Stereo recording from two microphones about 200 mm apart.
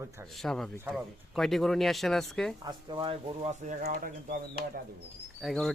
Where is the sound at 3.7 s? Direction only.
40° right (ahead or behind).